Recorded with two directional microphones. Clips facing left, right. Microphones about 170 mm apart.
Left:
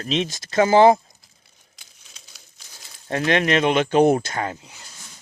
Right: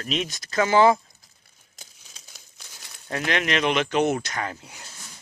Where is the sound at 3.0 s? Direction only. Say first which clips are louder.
Left 6 dB; 30° left (ahead or behind).